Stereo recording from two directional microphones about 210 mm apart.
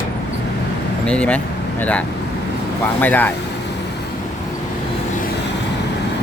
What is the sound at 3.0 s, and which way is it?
Speech, 10° left (ahead or behind).